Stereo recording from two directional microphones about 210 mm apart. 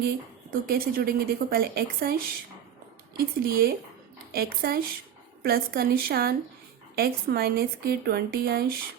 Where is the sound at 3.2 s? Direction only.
45° right (ahead or behind).